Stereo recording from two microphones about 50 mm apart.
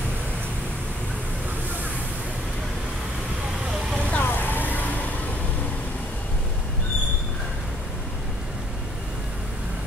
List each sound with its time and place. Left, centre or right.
3.9 s vehicle: left
4.2 s vehicle: left